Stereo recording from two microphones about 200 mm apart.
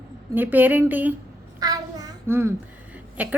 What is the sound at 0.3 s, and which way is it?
Speech, 10° right (ahead or behind).